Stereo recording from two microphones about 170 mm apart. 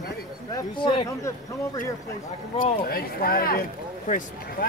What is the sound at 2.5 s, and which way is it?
Speech, 55° left (ahead or behind).